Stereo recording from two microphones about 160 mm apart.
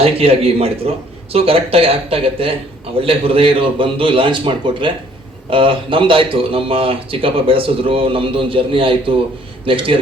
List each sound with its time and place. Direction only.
0.0 s a man's voice: 35° right (ahead or behind)